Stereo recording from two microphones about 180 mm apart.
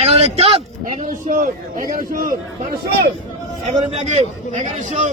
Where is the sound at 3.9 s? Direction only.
35° right (ahead or behind).